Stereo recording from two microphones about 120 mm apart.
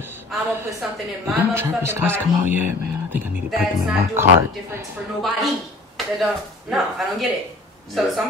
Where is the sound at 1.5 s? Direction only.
20° right (ahead or behind).